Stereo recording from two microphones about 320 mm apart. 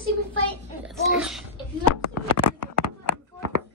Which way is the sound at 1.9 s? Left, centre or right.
Left.